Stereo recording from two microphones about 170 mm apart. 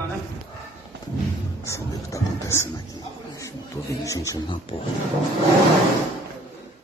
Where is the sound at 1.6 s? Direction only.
15° left (ahead or behind).